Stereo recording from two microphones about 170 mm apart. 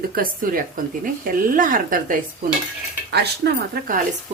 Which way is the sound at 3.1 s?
70° right (ahead or behind).